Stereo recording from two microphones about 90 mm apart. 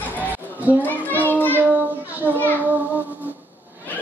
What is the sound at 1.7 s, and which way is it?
Child singing, 20° right (ahead or behind).